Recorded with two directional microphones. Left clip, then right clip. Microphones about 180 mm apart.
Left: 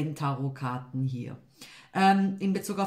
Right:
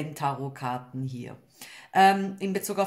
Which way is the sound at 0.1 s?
45° right (ahead or behind).